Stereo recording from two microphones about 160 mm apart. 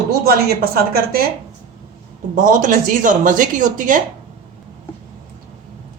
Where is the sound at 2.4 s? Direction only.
55° right (ahead or behind).